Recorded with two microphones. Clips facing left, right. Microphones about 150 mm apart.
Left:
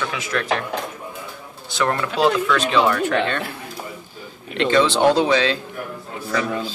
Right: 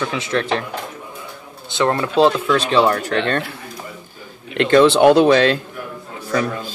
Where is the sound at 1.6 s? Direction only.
25° right (ahead or behind).